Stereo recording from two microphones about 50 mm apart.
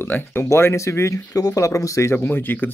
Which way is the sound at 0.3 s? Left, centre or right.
Left.